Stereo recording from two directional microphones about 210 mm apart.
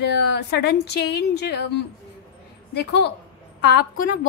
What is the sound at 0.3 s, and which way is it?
A woman's voice, 55° left (ahead or behind).